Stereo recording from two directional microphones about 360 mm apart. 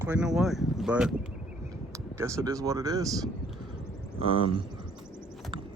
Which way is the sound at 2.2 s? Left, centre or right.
Centre.